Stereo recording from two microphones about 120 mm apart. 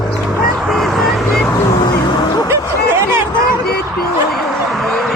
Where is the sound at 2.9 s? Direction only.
20° right (ahead or behind).